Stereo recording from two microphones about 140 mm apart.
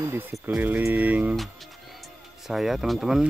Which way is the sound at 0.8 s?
10° right (ahead or behind).